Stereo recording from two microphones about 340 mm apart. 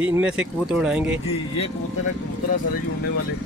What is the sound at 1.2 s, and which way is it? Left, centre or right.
Speech, centre.